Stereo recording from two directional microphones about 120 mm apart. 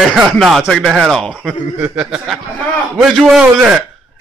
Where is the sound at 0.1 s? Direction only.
Centre (ahead or behind).